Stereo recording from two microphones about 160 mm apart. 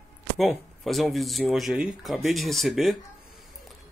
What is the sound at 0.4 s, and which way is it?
Speech, centre (ahead or behind).